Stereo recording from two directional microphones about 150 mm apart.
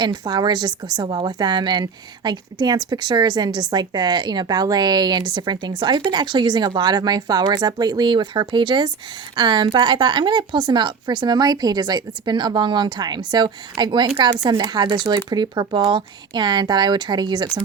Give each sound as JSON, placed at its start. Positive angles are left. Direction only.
{"t": 0.0, "sound": "a woman's voice", "side_deg": -30}